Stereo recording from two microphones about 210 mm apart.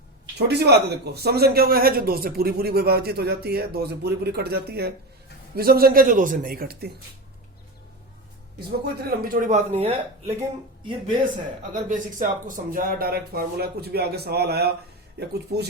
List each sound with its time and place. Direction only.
0.3 s a man's voice: 50° right (ahead or behind)
8.8 s speech: 45° right (ahead or behind); by 10.3 s 30° right (ahead or behind)
11.7 s a man's voice: 40° right (ahead or behind)